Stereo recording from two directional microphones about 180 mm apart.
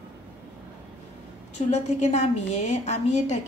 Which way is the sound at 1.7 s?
40° left (ahead or behind).